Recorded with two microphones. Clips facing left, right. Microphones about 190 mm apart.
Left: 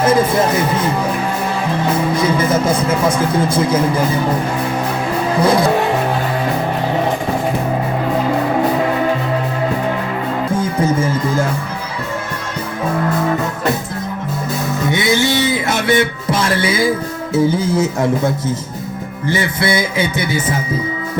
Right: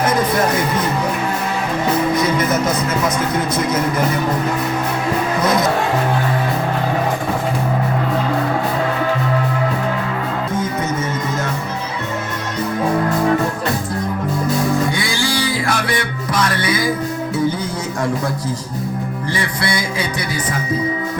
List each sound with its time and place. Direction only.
0.0 s speech: 25° left (ahead or behind)
2.1 s speech: 30° left (ahead or behind)
5.4 s speech: 30° left (ahead or behind)
10.5 s music: 30° left (ahead or behind)
14.8 s music: 20° left (ahead or behind)
17.3 s speech: 25° left (ahead or behind)